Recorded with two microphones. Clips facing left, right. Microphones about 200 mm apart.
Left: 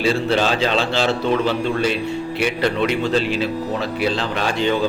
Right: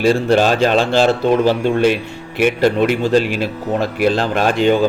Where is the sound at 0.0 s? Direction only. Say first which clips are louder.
Right 5 dB; 50° right (ahead or behind).